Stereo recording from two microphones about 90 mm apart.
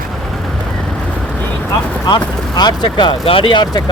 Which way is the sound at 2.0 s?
55° left (ahead or behind).